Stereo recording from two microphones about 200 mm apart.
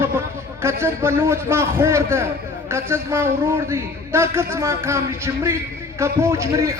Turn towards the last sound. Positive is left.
turn(degrees=-15)  # may be behind; listen again after turning